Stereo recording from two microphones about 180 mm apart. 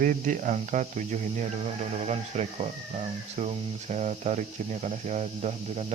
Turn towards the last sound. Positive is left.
turn(degrees=-35)  # may be behind; listen again after turning